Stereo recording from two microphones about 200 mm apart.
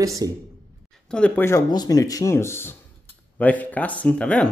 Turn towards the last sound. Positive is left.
turn(degrees=5)  # may be behind; listen again after turning